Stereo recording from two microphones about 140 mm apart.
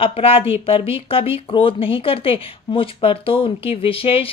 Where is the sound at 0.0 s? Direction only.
40° left (ahead or behind).